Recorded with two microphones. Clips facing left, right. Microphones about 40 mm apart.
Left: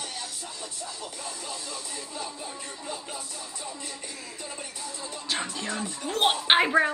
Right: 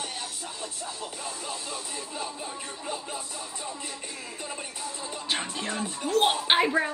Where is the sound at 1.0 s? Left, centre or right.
Right.